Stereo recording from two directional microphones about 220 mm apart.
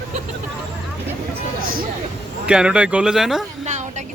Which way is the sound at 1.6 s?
40° right (ahead or behind).